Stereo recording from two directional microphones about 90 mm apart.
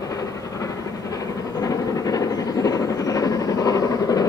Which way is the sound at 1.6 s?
40° left (ahead or behind).